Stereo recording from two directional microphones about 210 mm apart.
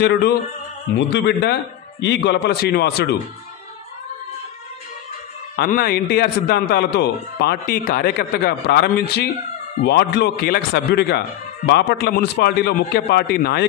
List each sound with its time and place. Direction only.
0.0 s speech: 50° left (ahead or behind)
5.6 s speech: 45° left (ahead or behind)